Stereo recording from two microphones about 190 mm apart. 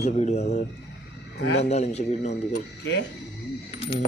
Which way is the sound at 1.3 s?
65° left (ahead or behind).